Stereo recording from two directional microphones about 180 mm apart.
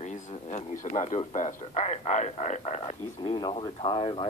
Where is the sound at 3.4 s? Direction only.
25° left (ahead or behind).